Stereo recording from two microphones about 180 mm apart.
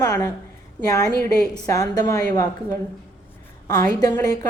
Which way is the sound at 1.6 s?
20° left (ahead or behind).